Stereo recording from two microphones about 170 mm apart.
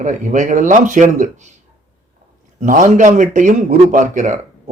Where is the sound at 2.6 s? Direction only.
50° right (ahead or behind).